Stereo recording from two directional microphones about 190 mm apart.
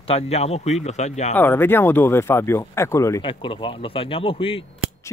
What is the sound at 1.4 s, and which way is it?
Speech, 10° left (ahead or behind).